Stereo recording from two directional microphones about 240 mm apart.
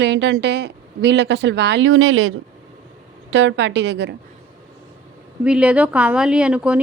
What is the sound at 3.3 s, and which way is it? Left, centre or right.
Speech, right.